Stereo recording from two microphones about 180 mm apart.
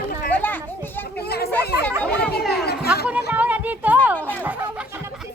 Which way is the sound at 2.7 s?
60° left (ahead or behind).